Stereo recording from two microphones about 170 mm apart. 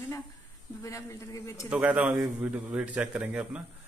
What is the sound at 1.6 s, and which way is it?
A man's voice, 10° right (ahead or behind).